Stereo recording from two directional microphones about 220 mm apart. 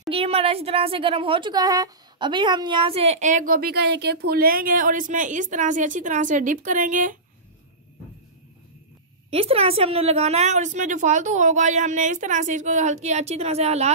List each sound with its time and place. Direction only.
0.1 s a woman's voice: 25° right (ahead or behind)
9.3 s a woman's voice: 25° right (ahead or behind)